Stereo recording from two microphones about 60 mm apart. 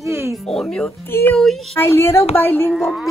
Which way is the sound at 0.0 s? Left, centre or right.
Right.